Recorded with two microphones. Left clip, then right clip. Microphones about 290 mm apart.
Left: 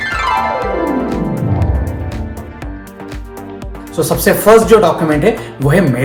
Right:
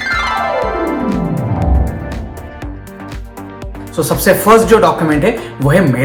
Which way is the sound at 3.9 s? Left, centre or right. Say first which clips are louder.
Right 1 dB; centre.